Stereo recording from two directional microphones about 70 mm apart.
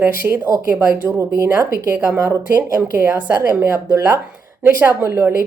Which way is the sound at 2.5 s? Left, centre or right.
Right.